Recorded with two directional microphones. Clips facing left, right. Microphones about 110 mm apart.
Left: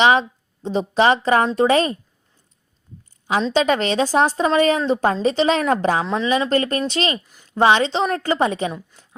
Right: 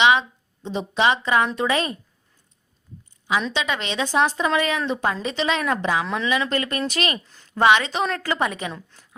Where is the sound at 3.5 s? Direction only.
40° left (ahead or behind).